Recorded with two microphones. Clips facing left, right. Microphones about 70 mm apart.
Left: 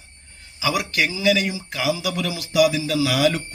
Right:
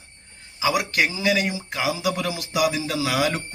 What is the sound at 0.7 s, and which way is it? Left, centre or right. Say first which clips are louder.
Speech: even; right.